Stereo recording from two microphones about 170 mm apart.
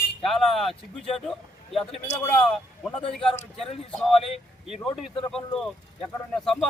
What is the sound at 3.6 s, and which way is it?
Speech, 5° left (ahead or behind).